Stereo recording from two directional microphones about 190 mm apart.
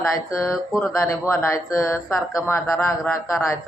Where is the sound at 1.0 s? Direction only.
15° left (ahead or behind).